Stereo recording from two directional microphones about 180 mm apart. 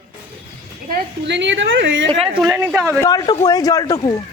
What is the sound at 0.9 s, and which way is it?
A woman's voice, 80° right.